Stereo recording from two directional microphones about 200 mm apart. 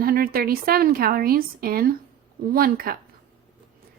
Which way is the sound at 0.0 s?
50° right (ahead or behind).